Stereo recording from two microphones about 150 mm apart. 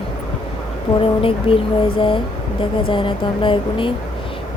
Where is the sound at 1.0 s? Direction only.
35° left (ahead or behind).